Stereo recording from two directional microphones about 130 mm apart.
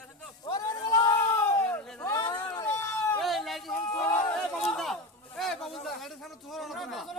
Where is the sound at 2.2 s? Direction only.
35° left (ahead or behind); by 3.2 s 20° left (ahead or behind).